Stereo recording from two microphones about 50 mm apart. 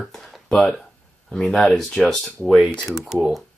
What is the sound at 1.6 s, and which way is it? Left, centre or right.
Speech, centre.